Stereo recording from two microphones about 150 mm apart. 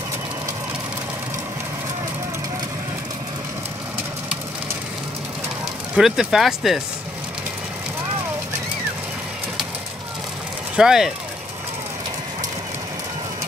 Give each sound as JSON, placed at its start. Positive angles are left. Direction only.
{"t": 5.9, "sound": "speech", "side_deg": -5}
{"t": 10.8, "sound": "speech", "side_deg": -5}